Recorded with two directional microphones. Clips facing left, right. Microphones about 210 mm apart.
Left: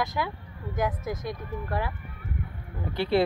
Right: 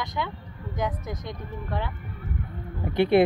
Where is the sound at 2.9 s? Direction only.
55° right (ahead or behind).